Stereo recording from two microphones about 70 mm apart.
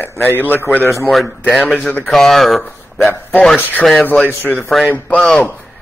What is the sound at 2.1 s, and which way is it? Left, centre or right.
Speech, centre.